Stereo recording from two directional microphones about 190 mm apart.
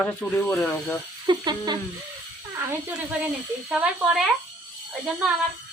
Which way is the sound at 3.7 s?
5° right (ahead or behind).